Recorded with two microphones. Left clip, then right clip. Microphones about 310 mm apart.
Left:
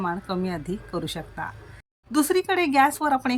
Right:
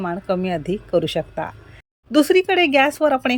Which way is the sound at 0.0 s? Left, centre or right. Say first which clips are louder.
Right 5 dB; centre.